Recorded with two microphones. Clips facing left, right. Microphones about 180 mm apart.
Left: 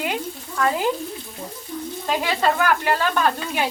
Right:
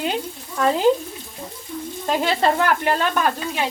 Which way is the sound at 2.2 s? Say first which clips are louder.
Right 2 dB; 30° right (ahead or behind).